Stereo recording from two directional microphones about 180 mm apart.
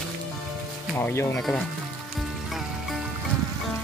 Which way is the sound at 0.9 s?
10° left (ahead or behind).